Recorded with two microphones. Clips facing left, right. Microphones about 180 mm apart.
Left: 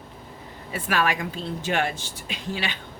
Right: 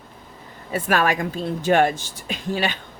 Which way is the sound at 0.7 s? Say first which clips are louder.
Right 4 dB; 45° right (ahead or behind).